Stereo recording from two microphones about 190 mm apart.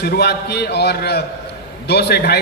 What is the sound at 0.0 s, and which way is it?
A man's voice, 60° left (ahead or behind).